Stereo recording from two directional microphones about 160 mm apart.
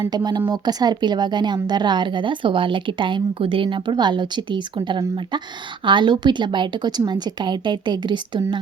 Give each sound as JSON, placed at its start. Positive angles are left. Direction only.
{"t": 0.0, "sound": "speech", "side_deg": -25}